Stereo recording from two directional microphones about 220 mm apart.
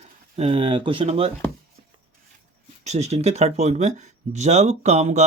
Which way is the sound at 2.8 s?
30° right (ahead or behind).